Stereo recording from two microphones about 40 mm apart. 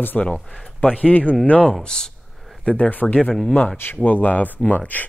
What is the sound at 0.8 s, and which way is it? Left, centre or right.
Speech, left.